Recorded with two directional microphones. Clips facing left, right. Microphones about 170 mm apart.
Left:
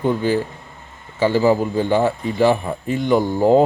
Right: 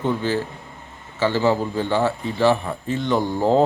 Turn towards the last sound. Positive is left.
turn(degrees=10)  # may be behind; listen again after turning